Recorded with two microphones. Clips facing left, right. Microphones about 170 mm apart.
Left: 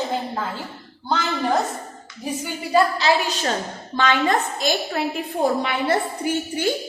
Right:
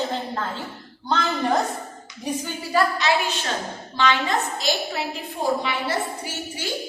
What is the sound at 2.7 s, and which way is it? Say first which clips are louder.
Speech: left 3 dB; 25° left (ahead or behind).